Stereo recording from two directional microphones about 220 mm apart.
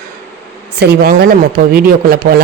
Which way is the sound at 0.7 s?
45° right (ahead or behind).